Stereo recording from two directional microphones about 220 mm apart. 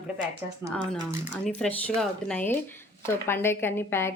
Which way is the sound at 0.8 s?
20° right (ahead or behind).